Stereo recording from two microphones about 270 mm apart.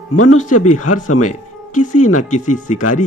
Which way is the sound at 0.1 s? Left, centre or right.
Left.